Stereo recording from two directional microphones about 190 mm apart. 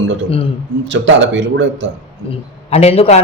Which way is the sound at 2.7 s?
35° left (ahead or behind).